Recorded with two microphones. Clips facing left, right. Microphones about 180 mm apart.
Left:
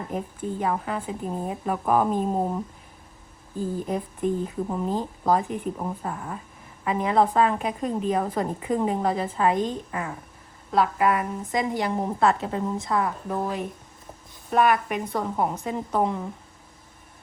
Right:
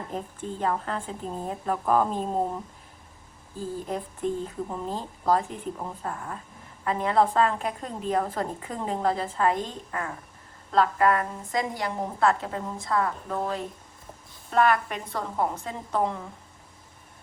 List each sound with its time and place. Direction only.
0.6 s a woman's voice: 10° left (ahead or behind)
3.6 s a woman's voice: 15° left (ahead or behind)